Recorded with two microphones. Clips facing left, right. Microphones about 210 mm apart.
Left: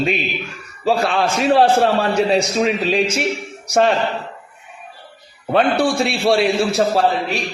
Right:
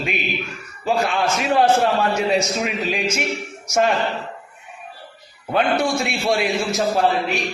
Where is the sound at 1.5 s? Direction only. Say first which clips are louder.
Left 2 dB; 35° left (ahead or behind).